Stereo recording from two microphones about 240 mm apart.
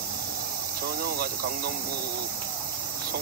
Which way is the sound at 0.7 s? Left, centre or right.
Right.